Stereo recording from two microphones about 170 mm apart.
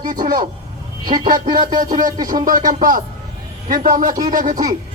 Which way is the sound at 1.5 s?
25° right (ahead or behind).